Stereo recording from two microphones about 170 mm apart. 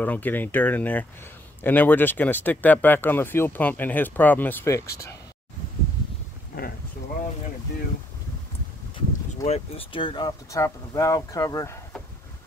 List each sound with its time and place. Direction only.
0.0 s speech: 10° left (ahead or behind)
9.3 s speech: 40° left (ahead or behind); by 11.8 s 15° left (ahead or behind)